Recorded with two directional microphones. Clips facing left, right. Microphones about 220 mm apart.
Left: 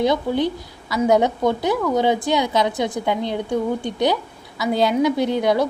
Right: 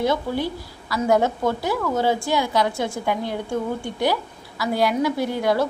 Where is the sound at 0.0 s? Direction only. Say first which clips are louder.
Left 3 dB; 20° left (ahead or behind).